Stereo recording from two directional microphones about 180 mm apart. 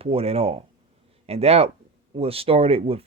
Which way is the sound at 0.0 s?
30° right (ahead or behind).